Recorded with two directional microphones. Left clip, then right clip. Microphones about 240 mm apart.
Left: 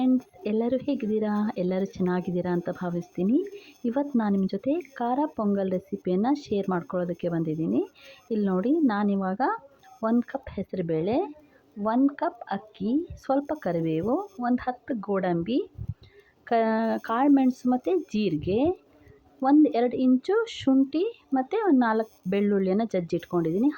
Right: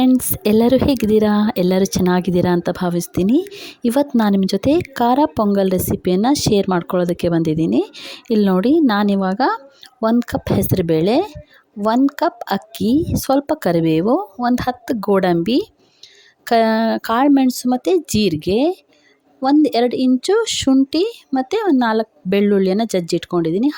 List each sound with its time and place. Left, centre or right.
0.0 s a woman's voice: right